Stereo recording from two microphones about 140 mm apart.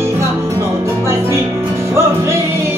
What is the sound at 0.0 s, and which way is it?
Music, 20° right (ahead or behind).